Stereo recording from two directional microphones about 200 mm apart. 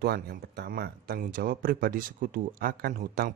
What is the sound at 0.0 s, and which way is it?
Speech, 50° right (ahead or behind).